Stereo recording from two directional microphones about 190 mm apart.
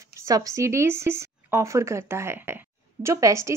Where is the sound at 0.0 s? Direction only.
15° right (ahead or behind).